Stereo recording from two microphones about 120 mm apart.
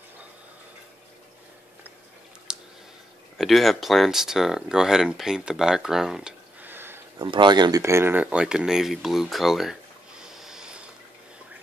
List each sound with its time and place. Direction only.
2.5 s clicking: 5° right (ahead or behind)
3.3 s speech: centre (ahead or behind)
6.6 s a sound: 15° right (ahead or behind)
7.2 s speech: 40° right (ahead or behind)
7.8 s speech: 20° right (ahead or behind)